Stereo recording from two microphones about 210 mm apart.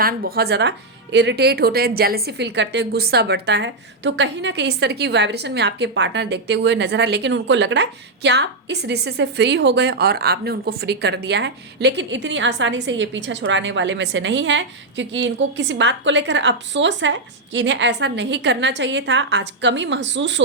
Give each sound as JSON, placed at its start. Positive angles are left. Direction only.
{"t": 0.0, "sound": "a woman's voice", "side_deg": -45}